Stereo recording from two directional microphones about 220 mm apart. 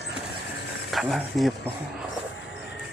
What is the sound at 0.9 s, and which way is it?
Speech, centre (ahead or behind).